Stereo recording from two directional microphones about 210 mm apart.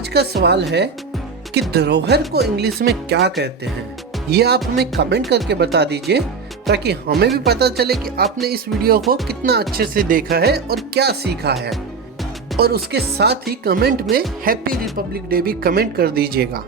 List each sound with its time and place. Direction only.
0.1 s speech: 50° right (ahead or behind)
12.5 s speech: 50° right (ahead or behind)